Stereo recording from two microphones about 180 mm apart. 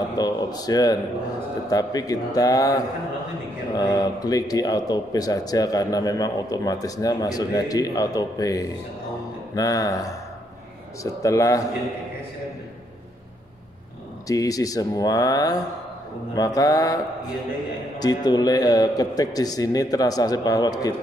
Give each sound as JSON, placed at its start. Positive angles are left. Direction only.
{"t": 0.2, "sound": "a man's voice", "side_deg": 20}
{"t": 14.2, "sound": "speech", "side_deg": 20}